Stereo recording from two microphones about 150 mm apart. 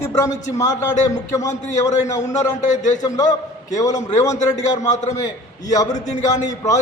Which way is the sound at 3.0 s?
25° left (ahead or behind).